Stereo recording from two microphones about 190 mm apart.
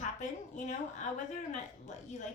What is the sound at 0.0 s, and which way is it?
A woman's voice, 40° left (ahead or behind).